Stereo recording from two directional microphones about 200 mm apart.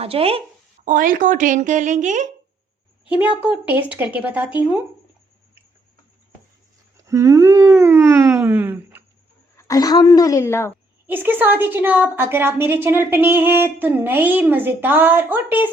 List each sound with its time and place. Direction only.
0.0 s speech: 30° right (ahead or behind)
0.9 s speech: 40° right (ahead or behind)
3.7 s a woman's voice: 10° right (ahead or behind)
6.9 s a woman's voice: 15° right (ahead or behind)
9.6 s a woman's voice: 15° left (ahead or behind)
11.0 s a woman's voice: 10° right (ahead or behind)